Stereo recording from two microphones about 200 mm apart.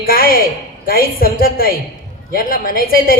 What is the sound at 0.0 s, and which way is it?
A woman's voice, 45° left (ahead or behind).